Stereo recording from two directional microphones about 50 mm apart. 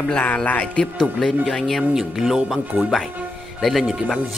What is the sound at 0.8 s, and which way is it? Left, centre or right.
Speech, centre.